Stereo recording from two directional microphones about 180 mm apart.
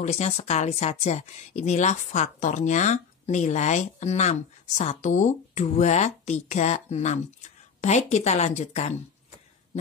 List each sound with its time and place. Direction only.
0.0 s speech: 40° left (ahead or behind)